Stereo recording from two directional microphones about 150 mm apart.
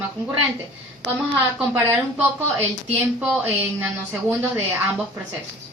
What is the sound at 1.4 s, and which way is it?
Speech, 10° right (ahead or behind).